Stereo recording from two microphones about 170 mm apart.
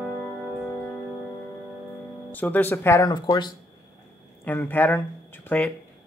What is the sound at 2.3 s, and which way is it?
Speech, 10° left (ahead or behind).